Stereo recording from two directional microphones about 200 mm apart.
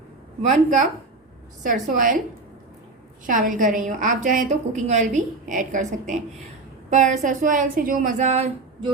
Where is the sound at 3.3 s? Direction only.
40° right (ahead or behind).